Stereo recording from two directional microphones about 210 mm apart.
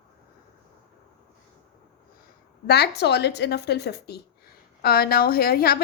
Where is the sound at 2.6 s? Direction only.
50° left (ahead or behind).